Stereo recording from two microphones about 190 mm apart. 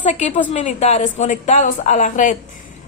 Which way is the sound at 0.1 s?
35° left (ahead or behind).